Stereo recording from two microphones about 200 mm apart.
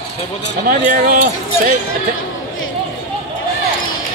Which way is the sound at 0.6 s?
40° right (ahead or behind).